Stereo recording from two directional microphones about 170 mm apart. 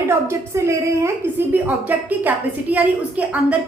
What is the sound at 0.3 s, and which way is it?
A woman's voice, 15° right (ahead or behind).